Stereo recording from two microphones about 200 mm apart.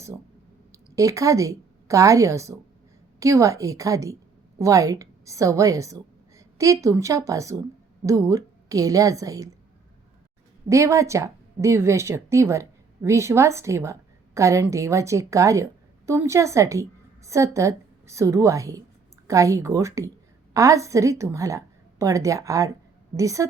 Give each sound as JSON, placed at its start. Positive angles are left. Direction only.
{"t": 0.7, "sound": "a woman's voice", "side_deg": -15}
{"t": 10.7, "sound": "a woman's voice", "side_deg": -15}